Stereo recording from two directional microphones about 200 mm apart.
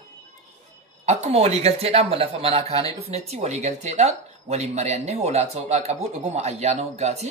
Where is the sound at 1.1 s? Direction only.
30° right (ahead or behind).